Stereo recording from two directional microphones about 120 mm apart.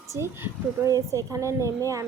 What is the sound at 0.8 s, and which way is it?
Speech, 25° right (ahead or behind).